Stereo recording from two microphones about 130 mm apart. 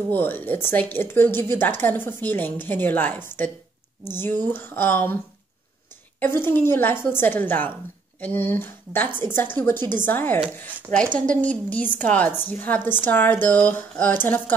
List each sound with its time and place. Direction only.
0.1 s a woman's voice: 15° left (ahead or behind)
11.4 s a woman's voice: 10° left (ahead or behind)